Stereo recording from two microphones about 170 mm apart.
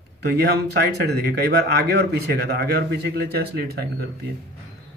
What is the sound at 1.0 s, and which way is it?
Speech, 70° right (ahead or behind).